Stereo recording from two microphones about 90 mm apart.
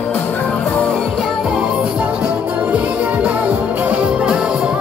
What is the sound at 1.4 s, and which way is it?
Music, 10° right (ahead or behind).